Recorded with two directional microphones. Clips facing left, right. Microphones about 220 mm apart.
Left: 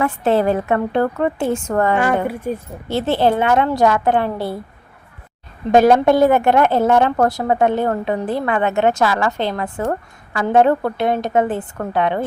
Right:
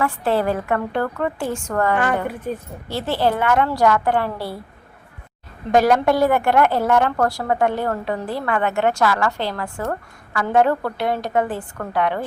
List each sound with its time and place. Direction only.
0.0 s a woman's voice: 20° left (ahead or behind)
2.2 s a woman's voice: 10° left (ahead or behind)
2.9 s a woman's voice: 25° left (ahead or behind)
5.7 s a woman's voice: 25° left (ahead or behind)